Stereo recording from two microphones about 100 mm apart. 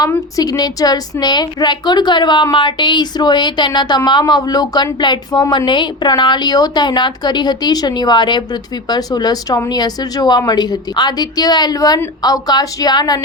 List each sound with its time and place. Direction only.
0.3 s a woman's voice: 40° left (ahead or behind)